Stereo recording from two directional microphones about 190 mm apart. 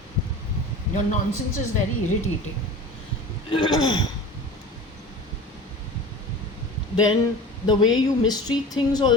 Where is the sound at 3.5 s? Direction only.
20° left (ahead or behind).